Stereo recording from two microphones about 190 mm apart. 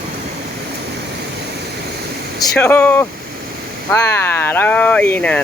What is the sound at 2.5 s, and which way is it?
Speech, 10° left (ahead or behind).